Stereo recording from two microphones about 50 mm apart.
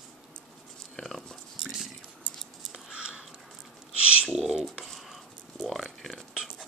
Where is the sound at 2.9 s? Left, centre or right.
Centre.